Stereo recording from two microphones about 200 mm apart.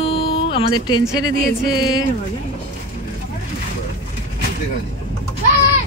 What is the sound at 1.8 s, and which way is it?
Speech, 20° left (ahead or behind).